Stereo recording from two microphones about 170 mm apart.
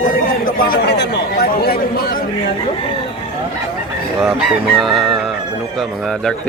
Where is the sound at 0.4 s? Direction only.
60° left (ahead or behind).